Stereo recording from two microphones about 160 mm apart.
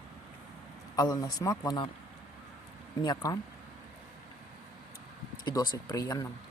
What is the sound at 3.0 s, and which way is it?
Speech, 25° left (ahead or behind).